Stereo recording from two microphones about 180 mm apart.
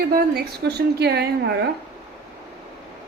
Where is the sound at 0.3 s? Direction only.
65° right (ahead or behind).